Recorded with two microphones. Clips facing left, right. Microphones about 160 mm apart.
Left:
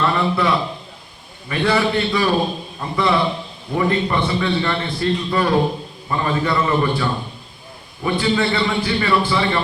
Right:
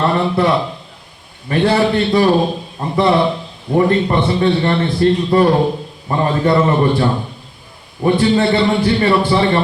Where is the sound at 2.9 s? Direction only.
40° right (ahead or behind).